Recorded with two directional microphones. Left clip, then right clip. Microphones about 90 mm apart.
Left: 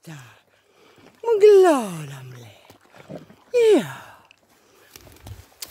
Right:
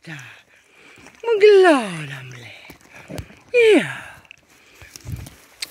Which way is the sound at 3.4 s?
15° left (ahead or behind).